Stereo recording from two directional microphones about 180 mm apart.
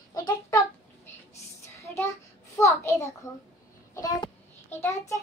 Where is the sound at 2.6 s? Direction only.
15° left (ahead or behind).